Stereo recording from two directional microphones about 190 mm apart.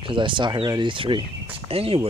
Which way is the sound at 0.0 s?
25° right (ahead or behind).